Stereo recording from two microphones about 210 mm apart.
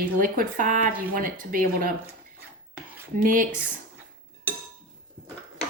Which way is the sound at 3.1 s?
40° right (ahead or behind).